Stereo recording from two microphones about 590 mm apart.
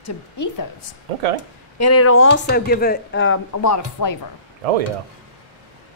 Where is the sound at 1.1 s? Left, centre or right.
Right.